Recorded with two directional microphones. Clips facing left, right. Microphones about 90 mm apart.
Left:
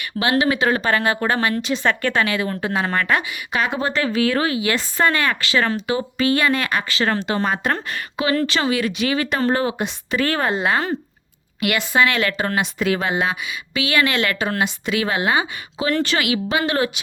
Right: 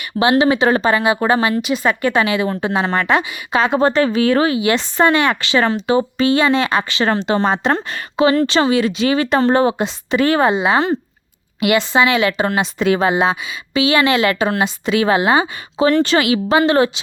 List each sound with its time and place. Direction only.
0.2 s speech: 25° right (ahead or behind)
0.9 s speech: 15° right (ahead or behind)